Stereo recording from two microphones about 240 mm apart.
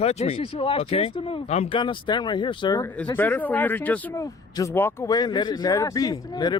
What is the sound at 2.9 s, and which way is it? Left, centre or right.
Speech, centre.